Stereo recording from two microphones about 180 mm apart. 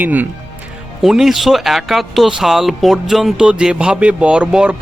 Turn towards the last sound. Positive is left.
turn(degrees=-5)  # may be behind; listen again after turning